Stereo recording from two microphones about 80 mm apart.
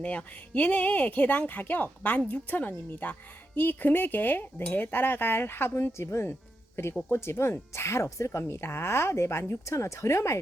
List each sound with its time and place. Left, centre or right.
0.0 s speech: centre; by 10.4 s left